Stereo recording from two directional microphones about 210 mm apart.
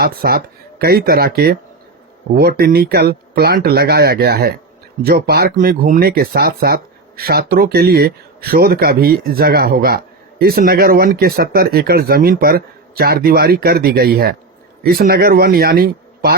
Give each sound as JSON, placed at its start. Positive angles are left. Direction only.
{"t": 0.0, "sound": "speech", "side_deg": -45}